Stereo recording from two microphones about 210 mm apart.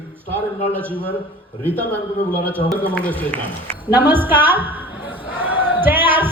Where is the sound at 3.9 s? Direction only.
10° right (ahead or behind).